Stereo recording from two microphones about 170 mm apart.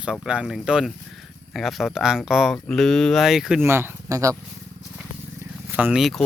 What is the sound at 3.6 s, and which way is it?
Speech, 15° right (ahead or behind).